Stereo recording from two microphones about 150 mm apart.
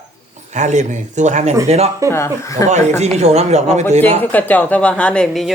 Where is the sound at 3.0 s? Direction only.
45° right (ahead or behind).